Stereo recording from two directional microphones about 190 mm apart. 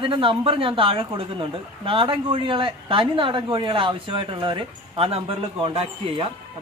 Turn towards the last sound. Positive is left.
turn(degrees=-30)  # may be behind; listen again after turning